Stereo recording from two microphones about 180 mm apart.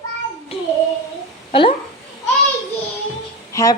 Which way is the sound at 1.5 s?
30° left (ahead or behind).